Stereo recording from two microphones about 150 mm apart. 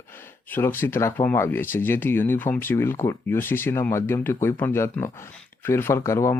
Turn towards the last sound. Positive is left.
turn(degrees=20)  # may be behind; listen again after turning